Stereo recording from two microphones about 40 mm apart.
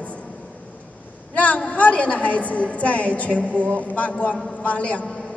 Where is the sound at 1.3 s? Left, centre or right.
Left.